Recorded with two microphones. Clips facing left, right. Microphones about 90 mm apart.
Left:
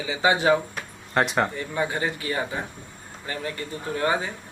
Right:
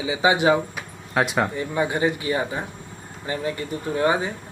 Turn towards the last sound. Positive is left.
turn(degrees=-20)  # may be behind; listen again after turning